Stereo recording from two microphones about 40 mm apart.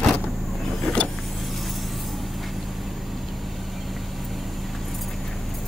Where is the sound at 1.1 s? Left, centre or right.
Centre.